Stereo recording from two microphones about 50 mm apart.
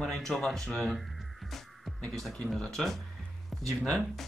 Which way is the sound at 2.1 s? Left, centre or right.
Centre.